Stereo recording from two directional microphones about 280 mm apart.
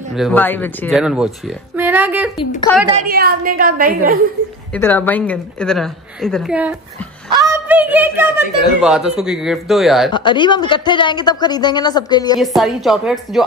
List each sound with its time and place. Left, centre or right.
0.1 s a woman's voice: centre
3.0 s a woman's voice: right
4.7 s a woman's voice: centre
10.1 s a woman's voice: centre
12.4 s a woman's voice: centre